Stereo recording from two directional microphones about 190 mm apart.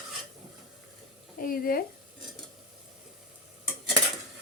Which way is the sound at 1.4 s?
50° left (ahead or behind).